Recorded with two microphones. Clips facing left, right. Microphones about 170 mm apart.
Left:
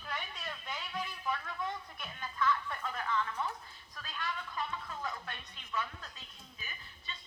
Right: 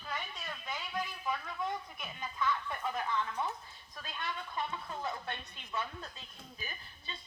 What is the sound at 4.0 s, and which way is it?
A woman's voice, 25° right (ahead or behind).